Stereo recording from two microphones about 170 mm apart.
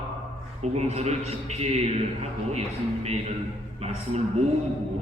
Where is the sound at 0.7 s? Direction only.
40° right (ahead or behind).